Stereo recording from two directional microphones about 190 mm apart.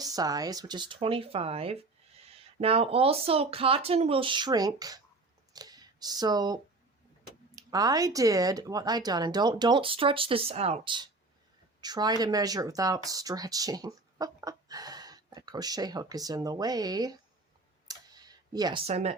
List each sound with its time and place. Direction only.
0.0 s speech: 20° right (ahead or behind)
17.8 s a sound: 20° right (ahead or behind)
18.9 s speech: 35° right (ahead or behind)